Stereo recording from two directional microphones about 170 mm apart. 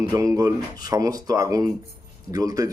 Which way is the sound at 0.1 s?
20° right (ahead or behind).